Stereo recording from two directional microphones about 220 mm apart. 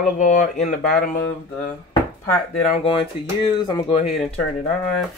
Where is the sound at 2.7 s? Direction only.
25° left (ahead or behind).